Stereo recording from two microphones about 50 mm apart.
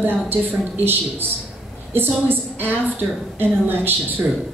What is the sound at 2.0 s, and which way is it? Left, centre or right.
A woman's voice, right.